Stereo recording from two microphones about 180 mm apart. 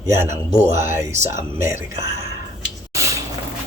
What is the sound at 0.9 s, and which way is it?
Speech, 15° right (ahead or behind).